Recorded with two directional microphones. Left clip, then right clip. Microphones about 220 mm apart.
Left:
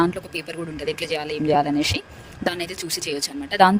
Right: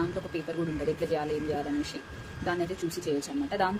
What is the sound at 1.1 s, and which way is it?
Speech, 45° left (ahead or behind).